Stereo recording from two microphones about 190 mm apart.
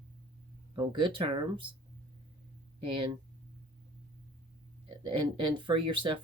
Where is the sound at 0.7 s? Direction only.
25° right (ahead or behind).